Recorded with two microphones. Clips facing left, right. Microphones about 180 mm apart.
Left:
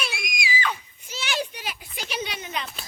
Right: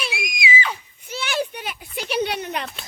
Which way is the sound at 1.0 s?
55° right (ahead or behind).